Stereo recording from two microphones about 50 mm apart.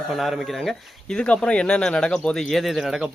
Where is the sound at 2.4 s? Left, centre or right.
Centre.